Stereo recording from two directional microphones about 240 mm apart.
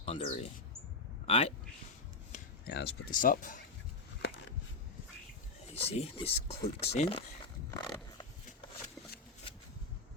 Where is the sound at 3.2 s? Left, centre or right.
Left.